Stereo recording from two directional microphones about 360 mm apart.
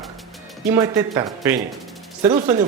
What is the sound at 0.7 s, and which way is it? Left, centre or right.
Speech, centre.